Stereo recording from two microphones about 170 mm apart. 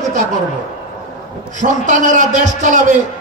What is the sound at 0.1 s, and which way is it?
Speech, 45° right (ahead or behind).